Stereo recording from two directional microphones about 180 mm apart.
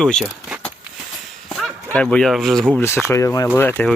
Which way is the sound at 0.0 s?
5° left (ahead or behind).